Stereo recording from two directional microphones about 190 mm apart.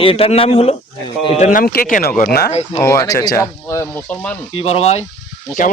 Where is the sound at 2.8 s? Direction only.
15° left (ahead or behind).